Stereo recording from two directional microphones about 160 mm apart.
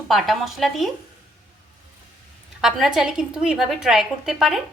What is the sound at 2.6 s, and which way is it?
A woman's voice, centre (ahead or behind).